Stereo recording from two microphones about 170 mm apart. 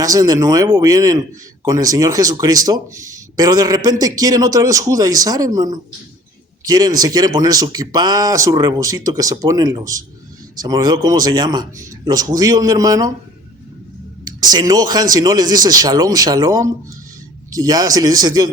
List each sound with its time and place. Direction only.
0.0 s speech: 20° right (ahead or behind)
14.3 s speech: 20° right (ahead or behind)